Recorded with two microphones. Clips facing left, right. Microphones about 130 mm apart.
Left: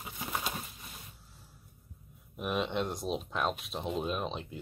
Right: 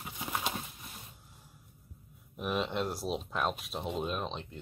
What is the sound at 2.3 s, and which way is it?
Speech, centre (ahead or behind).